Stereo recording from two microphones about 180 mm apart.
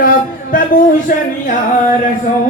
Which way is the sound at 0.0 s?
45° left (ahead or behind).